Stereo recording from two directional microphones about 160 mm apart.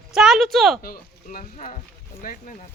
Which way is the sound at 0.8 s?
65° left (ahead or behind).